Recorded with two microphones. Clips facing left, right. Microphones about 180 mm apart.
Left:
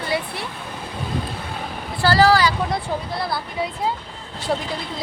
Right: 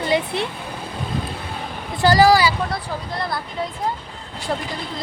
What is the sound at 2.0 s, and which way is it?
Speech, 15° right (ahead or behind).